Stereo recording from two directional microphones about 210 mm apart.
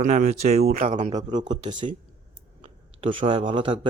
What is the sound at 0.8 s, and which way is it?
Speech, 35° right (ahead or behind).